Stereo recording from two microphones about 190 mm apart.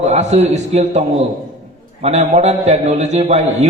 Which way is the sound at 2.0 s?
35° right (ahead or behind).